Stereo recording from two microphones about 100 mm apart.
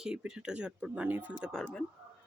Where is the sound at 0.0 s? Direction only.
5° right (ahead or behind).